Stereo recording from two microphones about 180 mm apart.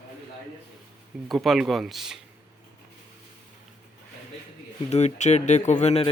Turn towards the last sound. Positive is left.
turn(degrees=35)  # may be behind; listen again after turning